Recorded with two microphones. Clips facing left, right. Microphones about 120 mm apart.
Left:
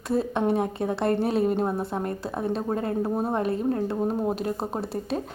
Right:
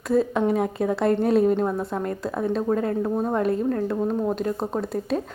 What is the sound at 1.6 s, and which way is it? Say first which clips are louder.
Speech: right 2 dB; 25° left (ahead or behind).